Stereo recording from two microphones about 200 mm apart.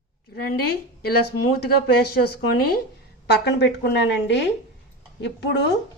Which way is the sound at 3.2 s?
55° left (ahead or behind).